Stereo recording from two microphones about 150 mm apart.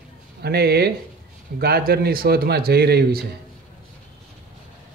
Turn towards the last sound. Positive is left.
turn(degrees=-90)